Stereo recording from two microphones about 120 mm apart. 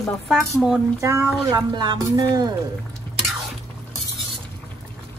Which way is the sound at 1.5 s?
35° right (ahead or behind).